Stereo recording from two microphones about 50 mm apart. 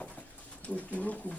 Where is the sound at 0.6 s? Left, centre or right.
Left.